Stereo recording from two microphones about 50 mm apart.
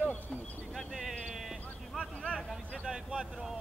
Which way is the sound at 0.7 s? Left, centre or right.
Centre.